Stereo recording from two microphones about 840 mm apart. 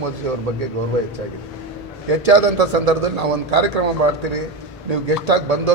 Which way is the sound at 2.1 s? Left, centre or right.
Right.